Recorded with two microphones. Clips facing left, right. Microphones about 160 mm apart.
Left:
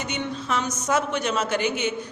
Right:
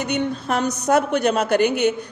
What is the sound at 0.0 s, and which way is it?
A woman's voice, 55° right (ahead or behind).